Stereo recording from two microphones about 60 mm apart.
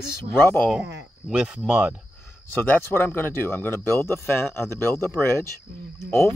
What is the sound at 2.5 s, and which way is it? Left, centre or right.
Speech, left.